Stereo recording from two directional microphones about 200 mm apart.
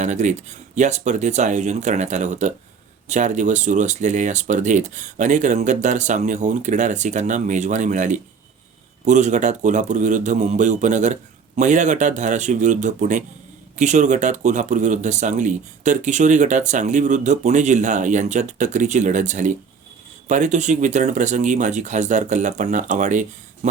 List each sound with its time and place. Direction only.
0.0 s speech: 35° right (ahead or behind)